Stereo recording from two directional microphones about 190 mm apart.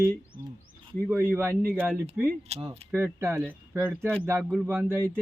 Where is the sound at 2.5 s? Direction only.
35° right (ahead or behind).